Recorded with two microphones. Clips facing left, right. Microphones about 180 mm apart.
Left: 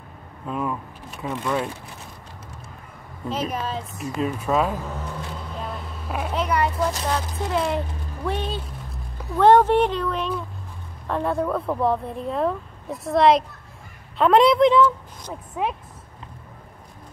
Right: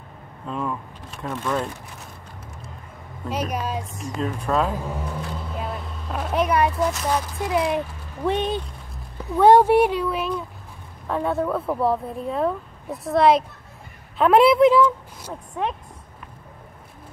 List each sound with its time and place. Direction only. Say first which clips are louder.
0.5 s speech: left 1 dB; 5° left (ahead or behind)
3.3 s speech: even; 10° right (ahead or behind)
4.0 s speech: left 4 dB; 5° left (ahead or behind)
4.7 s vehicle: right 2 dB; 10° right (ahead or behind)
6.0 s speech: left 1 dB; 5° left (ahead or behind)
6.3 s a woman's voice: right 4 dB; 15° right (ahead or behind)
15.6 s speech: even; 5° left (ahead or behind)